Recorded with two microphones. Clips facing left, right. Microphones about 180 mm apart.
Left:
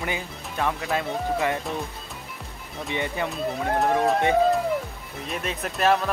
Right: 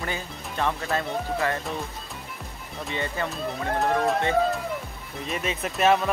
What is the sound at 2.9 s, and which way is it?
Speech, 15° left (ahead or behind).